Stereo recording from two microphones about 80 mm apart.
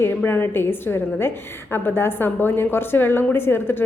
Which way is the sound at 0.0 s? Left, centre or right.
Left.